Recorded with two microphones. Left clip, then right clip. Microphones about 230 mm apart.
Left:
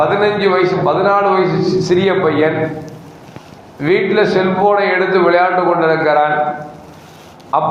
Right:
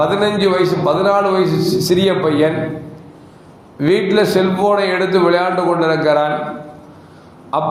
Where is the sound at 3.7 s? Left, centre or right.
Right.